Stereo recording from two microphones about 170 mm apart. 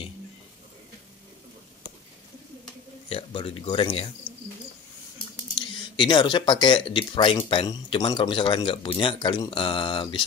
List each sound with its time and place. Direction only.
3.1 s speech: 35° left (ahead or behind)
5.6 s speech: 30° left (ahead or behind)